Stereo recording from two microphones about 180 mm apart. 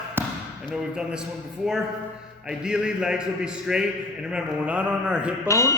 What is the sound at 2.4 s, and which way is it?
A man's voice, 5° right (ahead or behind).